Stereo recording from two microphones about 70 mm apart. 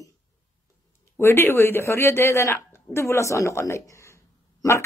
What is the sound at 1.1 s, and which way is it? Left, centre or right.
Speech, left.